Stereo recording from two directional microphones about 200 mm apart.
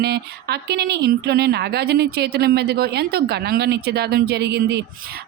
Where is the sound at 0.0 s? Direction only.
55° right (ahead or behind).